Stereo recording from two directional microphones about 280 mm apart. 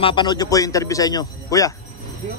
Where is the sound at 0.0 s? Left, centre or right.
Centre.